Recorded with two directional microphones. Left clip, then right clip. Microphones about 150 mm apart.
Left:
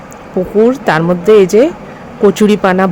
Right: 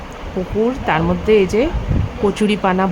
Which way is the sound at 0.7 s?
40° left (ahead or behind).